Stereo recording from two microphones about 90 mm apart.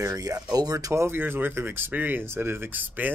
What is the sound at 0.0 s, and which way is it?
Speech, 40° right (ahead or behind).